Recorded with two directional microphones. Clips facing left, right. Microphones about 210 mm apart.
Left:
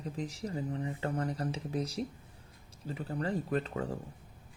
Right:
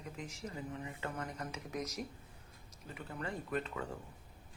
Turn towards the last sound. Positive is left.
turn(degrees=35)  # may be behind; listen again after turning